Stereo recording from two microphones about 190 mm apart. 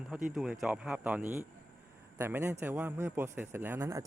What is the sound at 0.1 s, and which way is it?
A man's voice, 5° right (ahead or behind).